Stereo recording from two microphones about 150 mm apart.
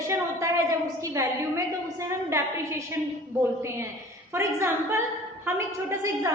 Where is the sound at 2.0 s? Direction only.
20° right (ahead or behind).